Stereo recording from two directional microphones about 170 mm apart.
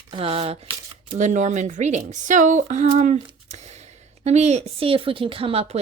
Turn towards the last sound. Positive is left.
turn(degrees=-35)  # may be behind; listen again after turning